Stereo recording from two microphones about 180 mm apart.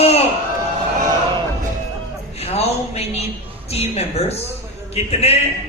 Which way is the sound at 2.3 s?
35° left (ahead or behind).